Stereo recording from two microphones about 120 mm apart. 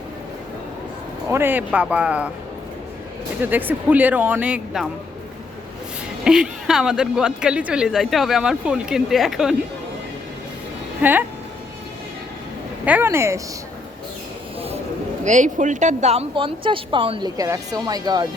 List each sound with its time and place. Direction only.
1.3 s speech: 20° right (ahead or behind)
3.4 s speech: 15° right (ahead or behind)
6.2 s speech: 5° right (ahead or behind)
11.0 s speech: 15° right (ahead or behind)
12.8 s speech: 15° right (ahead or behind)
15.2 s speech: 90° right; by 16.2 s 70° right (ahead or behind)
16.3 s a woman's voice: 45° right (ahead or behind)